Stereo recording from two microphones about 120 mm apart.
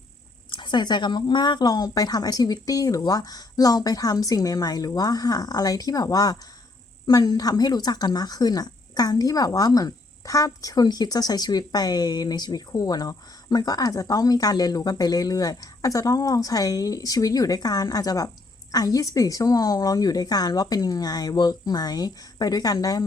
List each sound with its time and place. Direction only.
0.5 s speech: 40° left (ahead or behind)